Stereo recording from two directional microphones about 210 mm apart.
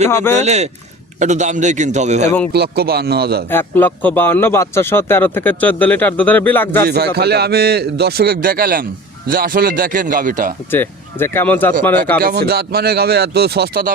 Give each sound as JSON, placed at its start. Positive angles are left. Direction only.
{"t": 0.1, "sound": "speech", "side_deg": 10}
{"t": 0.3, "sound": "speech", "side_deg": -30}
{"t": 2.5, "sound": "a man's voice", "side_deg": -45}
{"t": 3.5, "sound": "speech", "side_deg": 10}
{"t": 6.8, "sound": "a man's voice", "side_deg": -50}
{"t": 10.7, "sound": "speech", "side_deg": 10}
{"t": 12.2, "sound": "a man's voice", "side_deg": -45}